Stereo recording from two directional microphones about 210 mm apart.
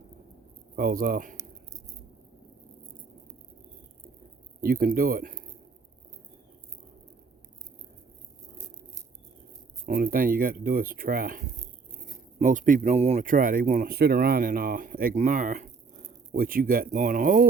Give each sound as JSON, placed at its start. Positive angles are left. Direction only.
{"t": 0.8, "sound": "speech", "side_deg": -45}
{"t": 4.6, "sound": "speech", "side_deg": -45}
{"t": 9.8, "sound": "speech", "side_deg": -45}